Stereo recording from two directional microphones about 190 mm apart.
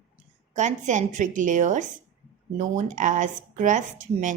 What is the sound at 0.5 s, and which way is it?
Speech, 40° right (ahead or behind).